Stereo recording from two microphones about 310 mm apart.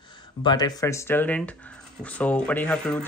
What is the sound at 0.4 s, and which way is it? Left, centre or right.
Speech, centre.